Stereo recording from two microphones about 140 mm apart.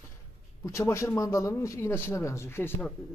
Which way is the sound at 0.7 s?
20° left (ahead or behind).